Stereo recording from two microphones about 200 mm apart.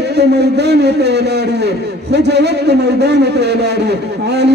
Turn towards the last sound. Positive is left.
turn(degrees=-55)  # may be behind; listen again after turning